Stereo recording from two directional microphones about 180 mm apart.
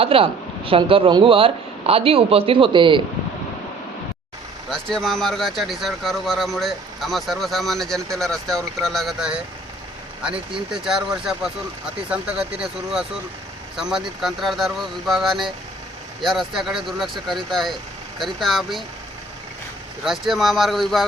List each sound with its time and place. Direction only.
0.0 s speech: 30° right (ahead or behind)
4.7 s speech: centre (ahead or behind)
20.1 s speech: centre (ahead or behind)